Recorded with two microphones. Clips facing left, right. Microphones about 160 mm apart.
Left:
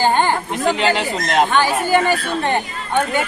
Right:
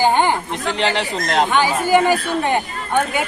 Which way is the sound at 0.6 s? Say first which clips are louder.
Left 6 dB; 40° left (ahead or behind).